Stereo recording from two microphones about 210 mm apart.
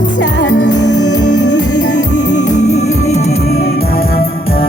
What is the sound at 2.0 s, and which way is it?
Music, 35° left (ahead or behind).